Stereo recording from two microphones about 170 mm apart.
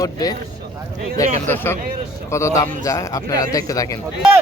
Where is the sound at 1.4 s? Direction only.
15° left (ahead or behind).